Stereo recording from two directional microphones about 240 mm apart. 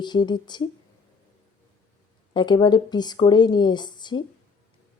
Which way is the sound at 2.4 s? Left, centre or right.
Centre.